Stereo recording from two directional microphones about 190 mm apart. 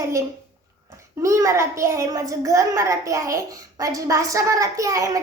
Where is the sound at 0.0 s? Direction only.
15° right (ahead or behind).